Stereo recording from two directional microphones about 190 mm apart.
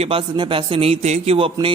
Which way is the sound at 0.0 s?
30° right (ahead or behind).